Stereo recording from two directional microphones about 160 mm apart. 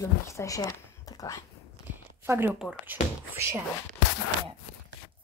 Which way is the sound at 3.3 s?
15° right (ahead or behind).